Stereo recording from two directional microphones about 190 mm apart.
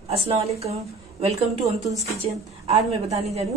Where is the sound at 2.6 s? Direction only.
35° right (ahead or behind).